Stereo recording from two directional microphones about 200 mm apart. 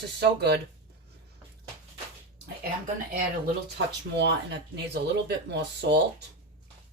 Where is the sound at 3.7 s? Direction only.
60° right (ahead or behind).